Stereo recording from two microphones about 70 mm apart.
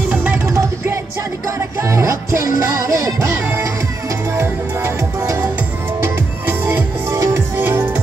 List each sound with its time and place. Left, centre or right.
0.5 s music: right
6.4 s music: right
7.2 s music: right